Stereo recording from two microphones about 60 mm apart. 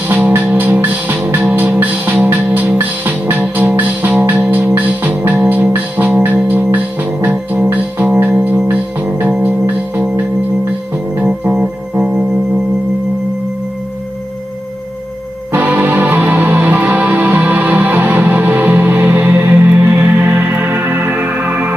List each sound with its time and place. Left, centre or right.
0.8 s music: right
8.6 s organ: right
11.2 s music: right
15.5 s music: right